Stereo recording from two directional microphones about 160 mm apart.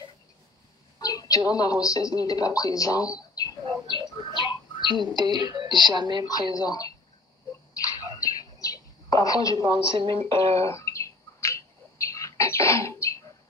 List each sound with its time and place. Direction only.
1.0 s a sound: 20° left (ahead or behind)
1.5 s speech: 20° left (ahead or behind)
4.9 s speech: 25° right (ahead or behind)
6.2 s speech: 25° left (ahead or behind)
7.8 s a sound: 20° left (ahead or behind)
9.6 s a woman's voice: 30° right (ahead or behind)
10.6 s bird: 20° left (ahead or behind)